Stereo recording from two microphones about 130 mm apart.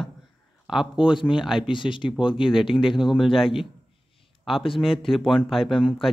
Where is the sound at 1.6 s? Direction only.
40° left (ahead or behind).